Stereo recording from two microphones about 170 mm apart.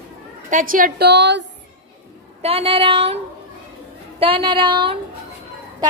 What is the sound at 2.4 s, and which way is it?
Speech, 35° right (ahead or behind).